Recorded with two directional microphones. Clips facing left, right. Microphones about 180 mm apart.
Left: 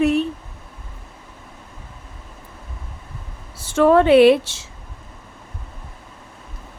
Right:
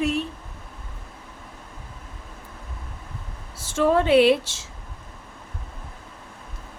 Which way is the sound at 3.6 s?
60° left (ahead or behind).